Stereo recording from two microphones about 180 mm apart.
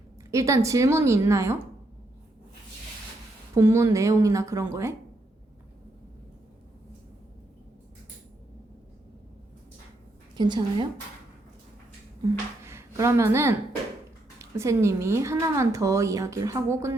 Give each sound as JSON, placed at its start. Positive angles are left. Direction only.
{"t": 0.3, "sound": "a woman's voice", "side_deg": -15}
{"t": 3.5, "sound": "a woman's voice", "side_deg": -15}
{"t": 10.3, "sound": "a woman's voice", "side_deg": -25}
{"t": 12.6, "sound": "a woman's voice", "side_deg": -15}